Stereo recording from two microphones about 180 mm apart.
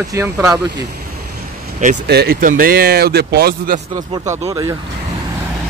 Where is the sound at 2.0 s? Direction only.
65° right (ahead or behind).